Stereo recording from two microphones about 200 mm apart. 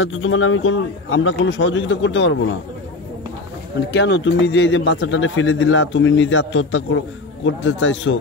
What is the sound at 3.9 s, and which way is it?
Speech, 65° left (ahead or behind).